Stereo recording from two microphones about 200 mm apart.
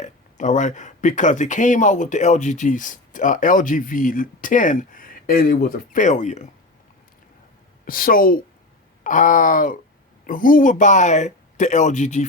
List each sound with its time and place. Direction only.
0.0 s speech: 40° left (ahead or behind)
7.9 s a woman's voice: 45° left (ahead or behind)